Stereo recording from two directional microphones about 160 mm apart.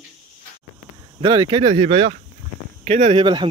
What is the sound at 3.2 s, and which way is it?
Speech, 30° right (ahead or behind).